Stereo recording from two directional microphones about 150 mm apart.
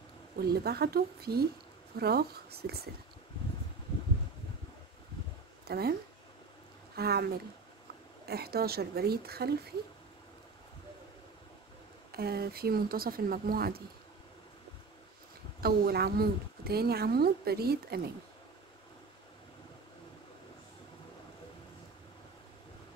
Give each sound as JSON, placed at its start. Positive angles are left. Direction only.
{"t": 0.4, "sound": "a woman's voice", "side_deg": -90}
{"t": 5.7, "sound": "a woman's voice", "side_deg": -90}
{"t": 7.0, "sound": "a woman's voice", "side_deg": -90}
{"t": 8.3, "sound": "a woman's voice", "side_deg": -90}
{"t": 12.1, "sound": "a woman's voice", "side_deg": -90}
{"t": 15.6, "sound": "a woman's voice", "side_deg": -90}